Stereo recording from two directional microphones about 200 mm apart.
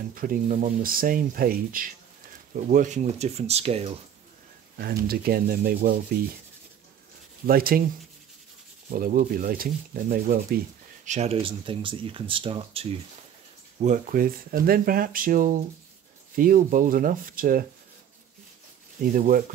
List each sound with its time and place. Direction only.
0.1 s speech: 45° right (ahead or behind)
5.0 s speech: 50° right (ahead or behind)
7.4 s speech: 45° right (ahead or behind)
8.9 s speech: 45° right (ahead or behind)
11.1 s speech: 30° right (ahead or behind)
13.7 s speech: 40° right (ahead or behind)
18.9 s speech: 45° right (ahead or behind)